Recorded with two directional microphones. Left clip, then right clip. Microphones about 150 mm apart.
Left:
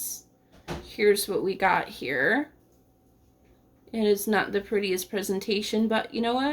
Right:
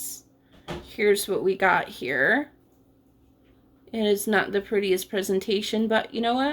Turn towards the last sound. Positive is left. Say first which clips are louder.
# right 2 dB
turn(degrees=-25)  # may be behind; listen again after turning